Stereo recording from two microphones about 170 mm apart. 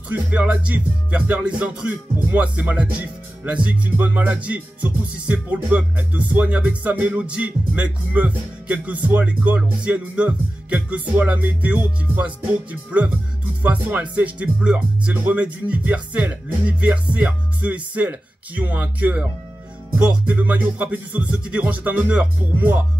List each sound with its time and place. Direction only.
0.1 s music: 10° right (ahead or behind)
13.6 s music: 10° right (ahead or behind)